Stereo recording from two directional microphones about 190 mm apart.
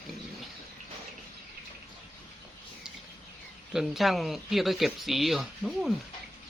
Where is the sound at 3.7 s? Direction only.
Centre (ahead or behind).